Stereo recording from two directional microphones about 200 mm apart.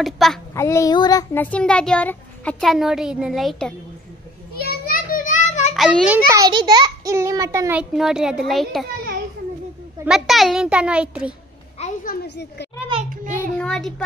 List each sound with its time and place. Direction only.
0.0 s a child's voice: centre (ahead or behind)
0.6 s a child's voice: 15° left (ahead or behind)
4.6 s children playing: 50° left (ahead or behind)
5.8 s a child's voice: centre (ahead or behind)
6.1 s a child's voice: 15° right (ahead or behind)
7.9 s a child's voice: centre (ahead or behind)
10.0 s a child's voice: centre (ahead or behind)
11.8 s a woman's voice: 45° left (ahead or behind)
13.3 s child singing: 5° left (ahead or behind)